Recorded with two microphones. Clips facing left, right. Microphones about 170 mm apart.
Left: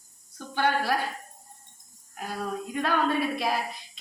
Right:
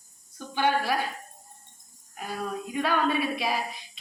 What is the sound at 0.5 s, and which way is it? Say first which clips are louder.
Speech: even; 10° right (ahead or behind).